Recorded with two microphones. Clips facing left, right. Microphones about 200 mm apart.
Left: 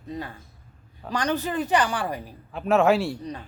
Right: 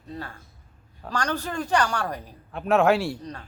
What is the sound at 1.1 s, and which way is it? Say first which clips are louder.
Speech: left 3 dB; 15° left (ahead or behind).